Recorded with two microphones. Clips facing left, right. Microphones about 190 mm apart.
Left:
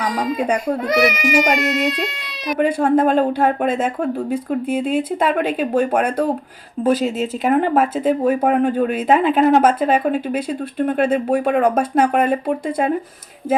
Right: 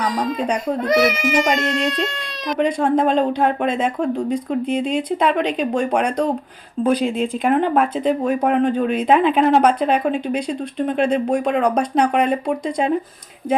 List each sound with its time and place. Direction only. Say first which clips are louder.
0.2 s speech: left 2 dB; 5° left (ahead or behind)